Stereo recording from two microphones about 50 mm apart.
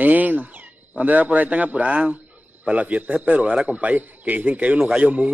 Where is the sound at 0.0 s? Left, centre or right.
Right.